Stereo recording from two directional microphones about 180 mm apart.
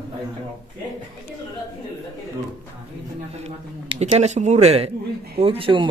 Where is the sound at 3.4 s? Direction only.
35° right (ahead or behind).